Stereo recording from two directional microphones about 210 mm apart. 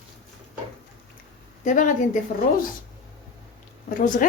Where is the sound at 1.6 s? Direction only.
40° left (ahead or behind).